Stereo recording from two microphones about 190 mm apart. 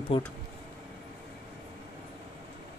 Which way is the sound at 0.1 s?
25° left (ahead or behind).